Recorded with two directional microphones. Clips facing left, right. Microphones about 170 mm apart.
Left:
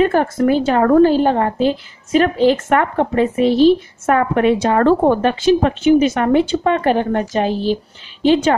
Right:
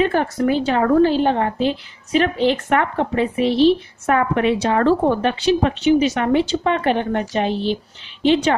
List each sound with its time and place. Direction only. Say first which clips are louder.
0.0 s a woman's voice: left 4 dB; 45° left (ahead or behind)